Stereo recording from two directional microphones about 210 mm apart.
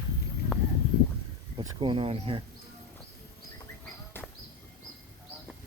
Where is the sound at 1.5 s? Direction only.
25° right (ahead or behind).